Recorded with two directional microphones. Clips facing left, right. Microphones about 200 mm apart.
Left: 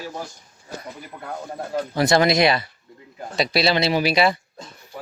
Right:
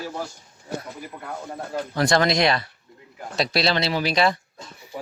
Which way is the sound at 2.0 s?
5° left (ahead or behind).